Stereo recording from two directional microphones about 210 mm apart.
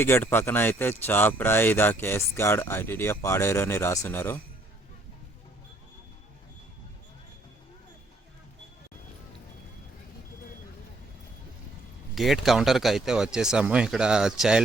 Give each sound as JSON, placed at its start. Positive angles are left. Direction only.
{"t": 0.0, "sound": "speech", "side_deg": 10}
{"t": 12.1, "sound": "speech", "side_deg": 0}